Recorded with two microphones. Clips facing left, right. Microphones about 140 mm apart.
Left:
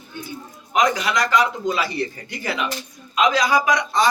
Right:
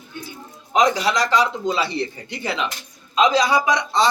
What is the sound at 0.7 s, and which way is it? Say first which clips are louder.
A man's voice: right 2 dB; 30° right (ahead or behind).